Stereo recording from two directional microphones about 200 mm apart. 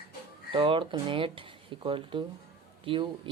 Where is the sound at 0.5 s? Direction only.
25° right (ahead or behind).